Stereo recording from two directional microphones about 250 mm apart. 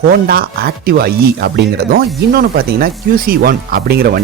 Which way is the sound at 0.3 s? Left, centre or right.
Right.